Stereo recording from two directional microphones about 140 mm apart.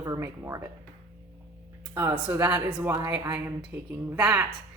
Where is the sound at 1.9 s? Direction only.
20° right (ahead or behind).